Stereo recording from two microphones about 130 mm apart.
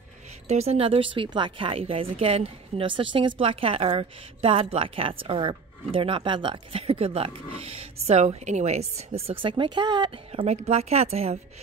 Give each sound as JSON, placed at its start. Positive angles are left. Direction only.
{"t": 0.5, "sound": "speech", "side_deg": -55}
{"t": 10.3, "sound": "speech", "side_deg": -50}